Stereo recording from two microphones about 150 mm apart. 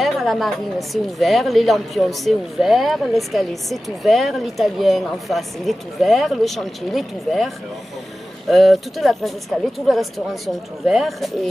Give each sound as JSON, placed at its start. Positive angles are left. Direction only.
{"t": 0.0, "sound": "a woman's voice", "side_deg": 0}